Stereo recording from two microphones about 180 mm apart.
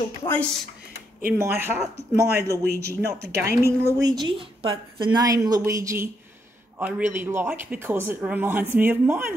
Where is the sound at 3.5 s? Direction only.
15° right (ahead or behind).